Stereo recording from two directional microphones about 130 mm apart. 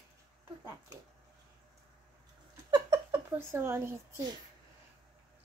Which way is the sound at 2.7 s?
35° right (ahead or behind).